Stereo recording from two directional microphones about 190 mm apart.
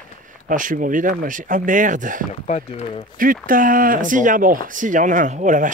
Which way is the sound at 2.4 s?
35° left (ahead or behind).